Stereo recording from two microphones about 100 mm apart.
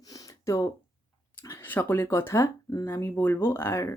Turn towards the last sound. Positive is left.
turn(degrees=25)  # may be behind; listen again after turning